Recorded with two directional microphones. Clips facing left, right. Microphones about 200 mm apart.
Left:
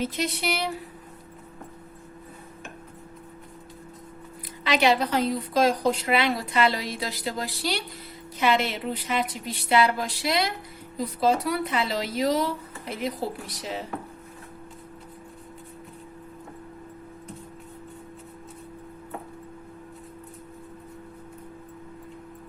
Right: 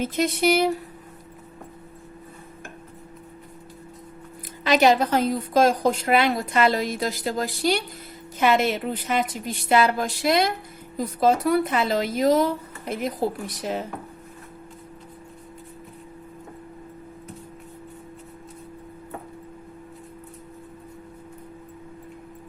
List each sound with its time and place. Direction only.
0.0 s a woman's voice: 50° right (ahead or behind)
4.6 s a woman's voice: 45° right (ahead or behind)